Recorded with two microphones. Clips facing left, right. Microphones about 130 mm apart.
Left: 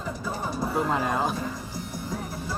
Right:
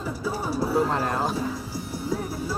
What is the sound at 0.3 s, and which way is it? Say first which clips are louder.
Speech: right 4 dB; centre (ahead or behind).